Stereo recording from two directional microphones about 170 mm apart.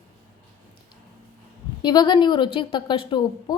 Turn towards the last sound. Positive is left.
turn(degrees=30)  # may be behind; listen again after turning